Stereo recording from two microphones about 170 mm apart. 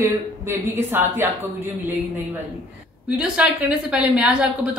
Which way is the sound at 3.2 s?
5° right (ahead or behind).